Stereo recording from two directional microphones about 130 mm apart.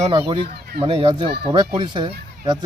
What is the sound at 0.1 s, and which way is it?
Speech, 35° right (ahead or behind).